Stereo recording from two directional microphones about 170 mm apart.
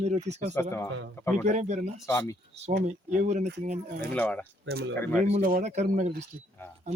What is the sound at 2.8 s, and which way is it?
Speech, 45° right (ahead or behind).